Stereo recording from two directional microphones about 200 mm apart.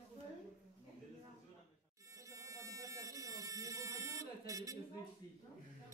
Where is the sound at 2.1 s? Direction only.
15° right (ahead or behind).